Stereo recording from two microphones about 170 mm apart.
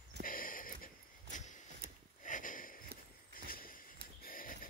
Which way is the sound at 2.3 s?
50° left (ahead or behind).